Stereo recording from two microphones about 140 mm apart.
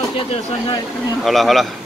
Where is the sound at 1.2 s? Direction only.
Centre (ahead or behind).